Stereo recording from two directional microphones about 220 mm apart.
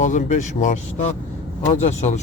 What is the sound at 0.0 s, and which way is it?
Speech, 35° left (ahead or behind).